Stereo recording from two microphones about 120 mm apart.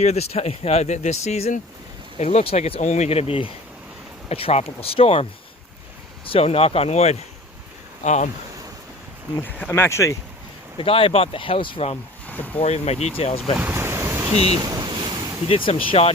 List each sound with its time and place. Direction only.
0.0 s speech: 65° left (ahead or behind)
2.8 s speech: 70° left (ahead or behind); by 5.2 s 55° left (ahead or behind)
6.2 s speech: 50° left (ahead or behind)
8.0 s speech: 75° left (ahead or behind)
9.4 s speech: 15° left (ahead or behind)
10.8 s speech: 50° left (ahead or behind)
12.2 s a sound: 15° left (ahead or behind)
12.5 s speech: 65° left (ahead or behind)
13.6 s ocean: 15° right (ahead or behind)
14.5 s ocean: 35° right (ahead or behind)
15.4 s speech: 50° left (ahead or behind)